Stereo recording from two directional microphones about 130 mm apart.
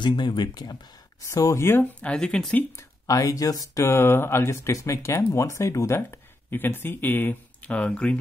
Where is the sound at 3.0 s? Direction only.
25° left (ahead or behind).